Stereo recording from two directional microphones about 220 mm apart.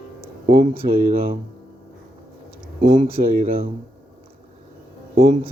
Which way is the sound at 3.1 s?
40° right (ahead or behind).